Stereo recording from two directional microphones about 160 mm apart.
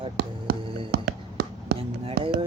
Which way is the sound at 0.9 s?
85° right.